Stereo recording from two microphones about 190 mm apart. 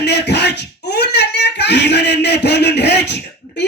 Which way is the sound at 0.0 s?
60° left (ahead or behind).